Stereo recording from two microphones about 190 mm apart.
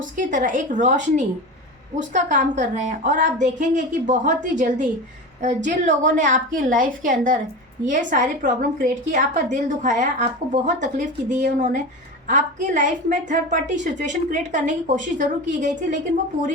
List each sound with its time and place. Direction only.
0.0 s a woman's voice: 40° right (ahead or behind)